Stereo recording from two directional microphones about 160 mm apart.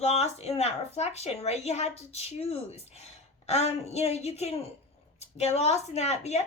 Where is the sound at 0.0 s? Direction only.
40° left (ahead or behind).